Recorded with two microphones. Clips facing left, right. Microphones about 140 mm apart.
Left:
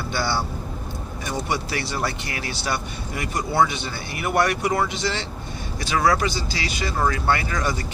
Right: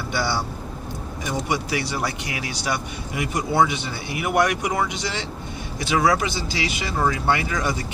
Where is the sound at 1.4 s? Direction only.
15° right (ahead or behind).